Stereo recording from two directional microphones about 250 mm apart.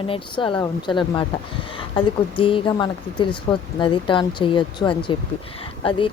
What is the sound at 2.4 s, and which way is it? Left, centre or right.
Speech, left.